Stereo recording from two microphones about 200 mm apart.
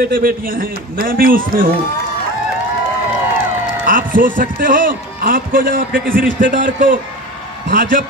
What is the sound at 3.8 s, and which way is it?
A man's voice, 40° right (ahead or behind).